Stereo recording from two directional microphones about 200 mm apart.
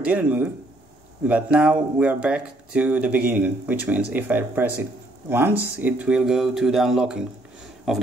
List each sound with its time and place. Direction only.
0.0 s speech: 5° right (ahead or behind)